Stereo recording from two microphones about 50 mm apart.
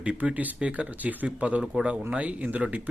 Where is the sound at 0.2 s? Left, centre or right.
Right.